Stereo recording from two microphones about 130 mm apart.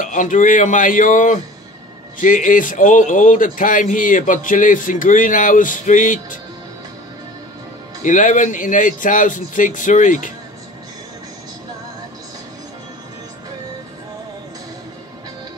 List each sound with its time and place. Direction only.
0.0 s a man's voice: 80° left
8.0 s speech: 80° left